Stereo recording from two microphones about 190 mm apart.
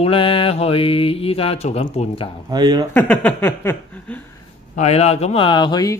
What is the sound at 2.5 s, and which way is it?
Speech, 20° right (ahead or behind).